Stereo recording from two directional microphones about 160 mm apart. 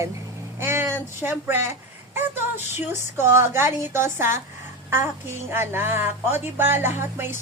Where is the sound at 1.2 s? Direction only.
15° right (ahead or behind).